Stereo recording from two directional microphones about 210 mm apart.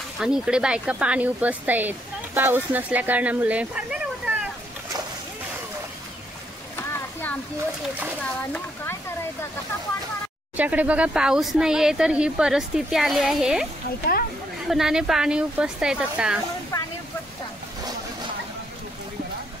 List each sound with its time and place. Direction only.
0.2 s speech: 5° right (ahead or behind)
6.8 s a sound: 10° left (ahead or behind)
8.2 s speech: 5° left (ahead or behind)
10.5 s speech: 5° right (ahead or behind)
14.7 s speech: centre (ahead or behind)
16.7 s a sound: 15° left (ahead or behind)